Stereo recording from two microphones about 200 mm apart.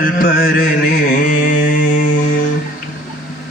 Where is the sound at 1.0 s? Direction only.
45° left (ahead or behind).